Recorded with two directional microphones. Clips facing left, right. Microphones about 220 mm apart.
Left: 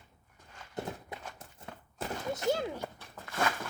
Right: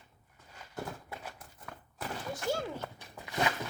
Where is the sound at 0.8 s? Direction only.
20° left (ahead or behind).